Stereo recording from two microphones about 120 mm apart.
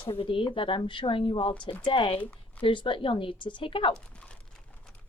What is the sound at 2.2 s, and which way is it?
Speech, 15° left (ahead or behind).